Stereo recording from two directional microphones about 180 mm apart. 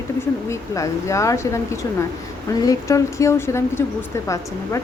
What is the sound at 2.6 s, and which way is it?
A woman's voice, 20° left (ahead or behind).